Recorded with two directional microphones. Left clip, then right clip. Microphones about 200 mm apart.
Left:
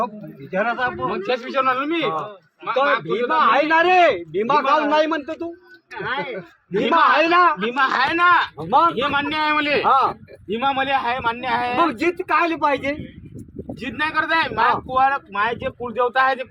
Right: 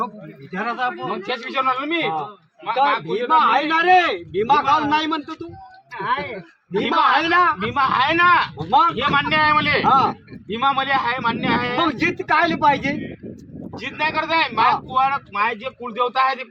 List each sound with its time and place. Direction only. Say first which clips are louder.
0.5 s speech: left 2 dB; 5° left (ahead or behind)
1.1 s speech: left 2 dB; 15° right (ahead or behind)
3.1 s a man's voice: right 1 dB; 10° left (ahead or behind)
5.9 s speech: right 2 dB; 15° right (ahead or behind)
6.9 s a man's voice: left 1 dB; 10° left (ahead or behind)
7.6 s speech: right 1 dB; 10° right (ahead or behind)
8.7 s a man's voice: even; 15° left (ahead or behind)
9.0 s speech: right 3 dB; 10° right (ahead or behind)
9.8 s a man's voice: left 1 dB; 15° left (ahead or behind)
10.5 s speech: right 1 dB; 5° right (ahead or behind)
11.9 s a man's voice: right 1 dB; 15° left (ahead or behind)
13.7 s speech: even; 10° right (ahead or behind)